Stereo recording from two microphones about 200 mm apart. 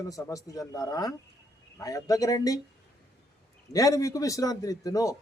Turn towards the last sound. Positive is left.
turn(degrees=15)  # may be behind; listen again after turning